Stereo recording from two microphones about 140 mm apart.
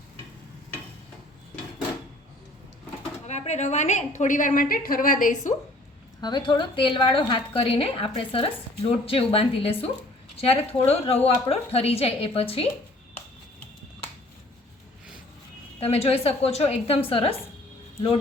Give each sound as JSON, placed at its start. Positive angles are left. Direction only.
{"t": 3.2, "sound": "a woman's voice", "side_deg": 55}
{"t": 6.2, "sound": "a woman's voice", "side_deg": 35}
{"t": 15.8, "sound": "a woman's voice", "side_deg": 45}